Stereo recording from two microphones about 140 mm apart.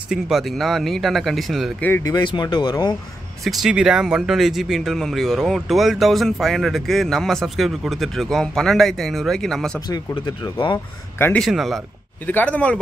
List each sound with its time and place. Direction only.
0.1 s speech: centre (ahead or behind)
1.8 s speech: 15° left (ahead or behind)
2.0 s speech: 35° left (ahead or behind)
3.4 s speech: 5° right (ahead or behind)
9.8 s speech: 30° left (ahead or behind)
11.1 s speech: 15° left (ahead or behind)
11.4 s speech: centre (ahead or behind)
12.3 s speech: 10° left (ahead or behind)